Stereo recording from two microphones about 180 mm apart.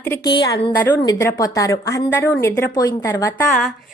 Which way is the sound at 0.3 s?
25° left (ahead or behind).